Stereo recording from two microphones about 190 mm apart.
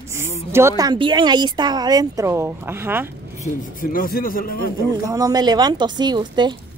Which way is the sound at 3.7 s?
50° left (ahead or behind).